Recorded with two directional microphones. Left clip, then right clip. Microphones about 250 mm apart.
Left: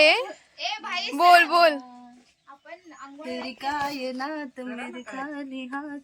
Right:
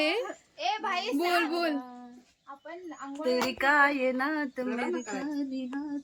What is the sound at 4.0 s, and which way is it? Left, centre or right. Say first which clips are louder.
A woman's voice: right 2 dB; centre.